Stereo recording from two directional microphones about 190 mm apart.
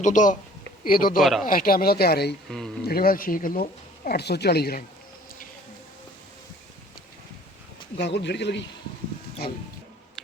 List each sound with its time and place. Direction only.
0.0 s a man's voice: 40° left (ahead or behind)
1.2 s speech: centre (ahead or behind)
1.5 s speech: 50° left (ahead or behind)
2.5 s speech: centre (ahead or behind)
2.8 s speech: 50° left (ahead or behind)
7.9 s speech: 65° left (ahead or behind)